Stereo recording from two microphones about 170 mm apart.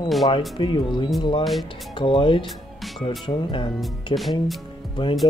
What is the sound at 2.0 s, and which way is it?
Speech, 30° left (ahead or behind).